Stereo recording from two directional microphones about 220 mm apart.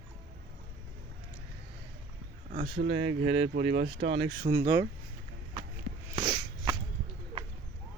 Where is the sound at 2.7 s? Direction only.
50° right (ahead or behind).